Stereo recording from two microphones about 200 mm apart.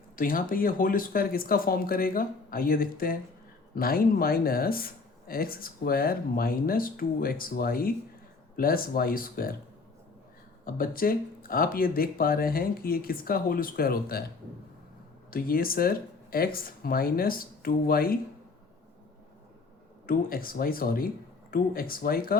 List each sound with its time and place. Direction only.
0.2 s speech: 45° left (ahead or behind)
10.7 s speech: 45° left (ahead or behind)
15.3 s speech: 45° left (ahead or behind)
20.1 s speech: 45° left (ahead or behind)